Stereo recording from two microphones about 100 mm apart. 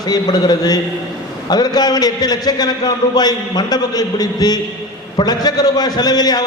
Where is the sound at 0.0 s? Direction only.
40° left (ahead or behind).